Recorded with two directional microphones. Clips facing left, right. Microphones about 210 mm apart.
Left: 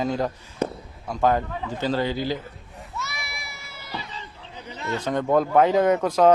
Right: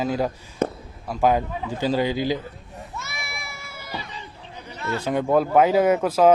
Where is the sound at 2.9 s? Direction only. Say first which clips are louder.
Left 2 dB; 50° right (ahead or behind).